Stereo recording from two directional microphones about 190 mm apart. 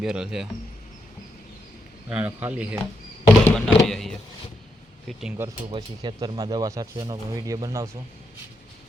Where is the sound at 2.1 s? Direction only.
10° right (ahead or behind).